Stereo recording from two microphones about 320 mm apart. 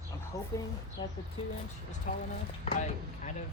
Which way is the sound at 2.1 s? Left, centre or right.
Left.